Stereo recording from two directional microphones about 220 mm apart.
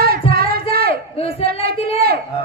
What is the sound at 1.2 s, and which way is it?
Speech, 25° left (ahead or behind).